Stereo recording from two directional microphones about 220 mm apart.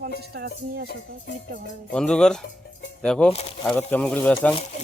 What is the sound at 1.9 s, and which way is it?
Speech, 5° left (ahead or behind).